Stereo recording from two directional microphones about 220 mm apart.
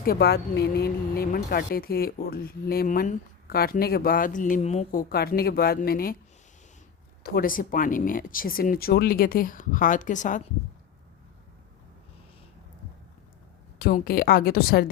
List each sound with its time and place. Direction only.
0.0 s speech: 45° left (ahead or behind)
7.3 s speech: 40° left (ahead or behind)
13.7 s speech: 40° left (ahead or behind)